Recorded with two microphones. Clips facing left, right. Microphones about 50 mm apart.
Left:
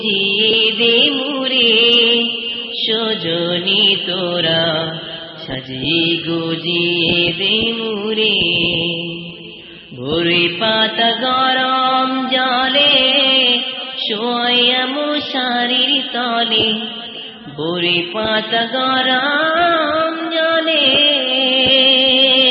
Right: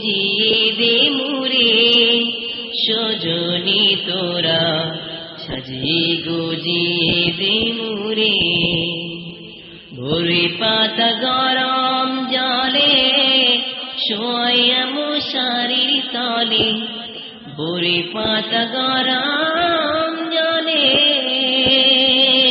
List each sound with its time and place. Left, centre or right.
0.0 s music: left
2.8 s mantra: left
5.8 s mantra: left
10.2 s mantra: left
10.9 s chant: centre
12.0 s mantra: left
14.1 s chant: centre
15.1 s mantra: left
19.2 s music: centre